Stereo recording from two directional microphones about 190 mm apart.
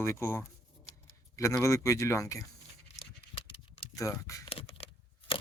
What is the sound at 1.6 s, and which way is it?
Speech, 15° left (ahead or behind).